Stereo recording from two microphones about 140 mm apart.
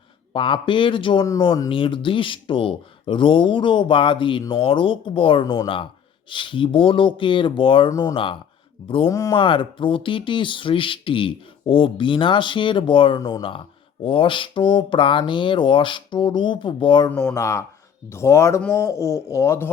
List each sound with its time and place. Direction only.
0.3 s speech: 35° left (ahead or behind)
7.9 s speech: 25° left (ahead or behind)
8.1 s speech: 35° left (ahead or behind)
9.0 s speech: 25° left (ahead or behind)
9.3 s speech: 35° left (ahead or behind)
13.1 s speech: 25° left (ahead or behind)
13.4 s speech: 35° left (ahead or behind)
17.1 s speech: 15° left (ahead or behind)